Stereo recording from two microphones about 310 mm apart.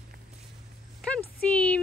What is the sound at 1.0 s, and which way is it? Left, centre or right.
Speech, centre.